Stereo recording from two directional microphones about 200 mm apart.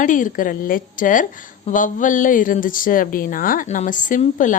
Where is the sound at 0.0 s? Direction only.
40° left (ahead or behind).